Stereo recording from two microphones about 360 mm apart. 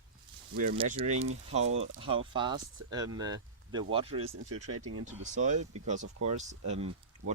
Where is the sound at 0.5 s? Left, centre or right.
Right.